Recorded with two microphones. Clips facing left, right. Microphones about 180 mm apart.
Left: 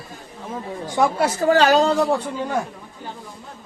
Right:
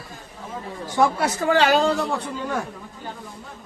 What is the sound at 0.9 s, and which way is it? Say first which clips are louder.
Speech: left 1 dB; 20° left (ahead or behind).